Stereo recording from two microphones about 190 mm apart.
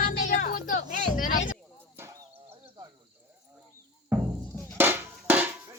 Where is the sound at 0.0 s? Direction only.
45° left (ahead or behind).